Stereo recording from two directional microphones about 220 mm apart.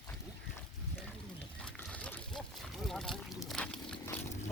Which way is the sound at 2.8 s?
Centre (ahead or behind).